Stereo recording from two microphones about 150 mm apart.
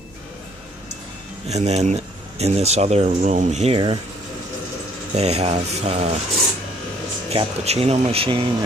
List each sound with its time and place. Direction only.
1.5 s speech: 45° right (ahead or behind)
5.1 s speech: 45° right (ahead or behind)
7.2 s speech: 45° right (ahead or behind)